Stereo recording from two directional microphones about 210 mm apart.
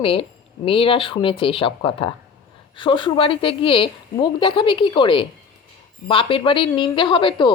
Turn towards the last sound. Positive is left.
turn(degrees=25)  # may be behind; listen again after turning